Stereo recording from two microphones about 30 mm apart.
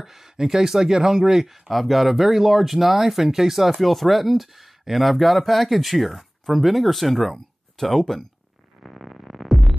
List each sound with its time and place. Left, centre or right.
0.0 s speech: centre
1.7 s speech: centre
3.8 s speech: centre
7.8 s speech: centre
8.8 s music: centre